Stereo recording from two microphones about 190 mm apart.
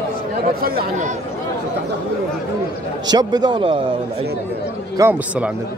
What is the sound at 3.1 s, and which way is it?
Speech, 20° right (ahead or behind).